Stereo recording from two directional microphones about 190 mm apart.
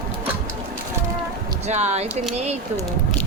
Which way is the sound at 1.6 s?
35° right (ahead or behind).